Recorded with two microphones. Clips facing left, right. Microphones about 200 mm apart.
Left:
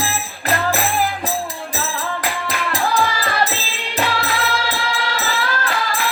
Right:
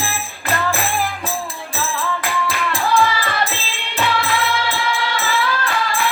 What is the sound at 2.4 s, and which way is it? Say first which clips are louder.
Music: left 1 dB; 40° left (ahead or behind).